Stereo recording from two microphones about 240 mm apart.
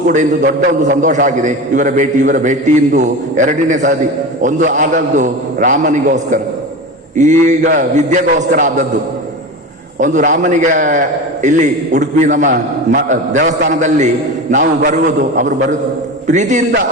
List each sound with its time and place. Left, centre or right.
0.1 s a man's voice: right
10.0 s a man's voice: right